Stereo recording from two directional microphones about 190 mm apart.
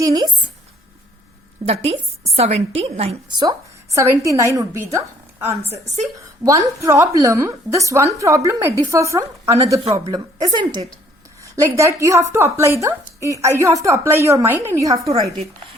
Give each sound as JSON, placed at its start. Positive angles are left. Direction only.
{"t": 0.0, "sound": "a woman's voice", "side_deg": -20}
{"t": 1.6, "sound": "a woman's voice", "side_deg": -30}
{"t": 3.9, "sound": "a woman's voice", "side_deg": -15}
{"t": 5.6, "sound": "a woman's voice", "side_deg": -35}
{"t": 6.4, "sound": "a woman's voice", "side_deg": -15}